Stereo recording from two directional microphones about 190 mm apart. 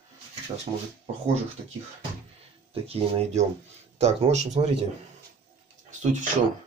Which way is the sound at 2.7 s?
30° right (ahead or behind).